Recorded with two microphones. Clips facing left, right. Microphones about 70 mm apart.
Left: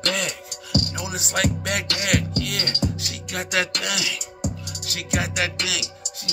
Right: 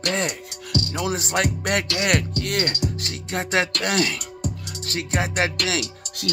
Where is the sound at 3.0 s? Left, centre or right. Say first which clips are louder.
Right 3 dB; right.